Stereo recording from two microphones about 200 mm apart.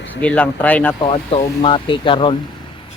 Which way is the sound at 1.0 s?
25° left (ahead or behind).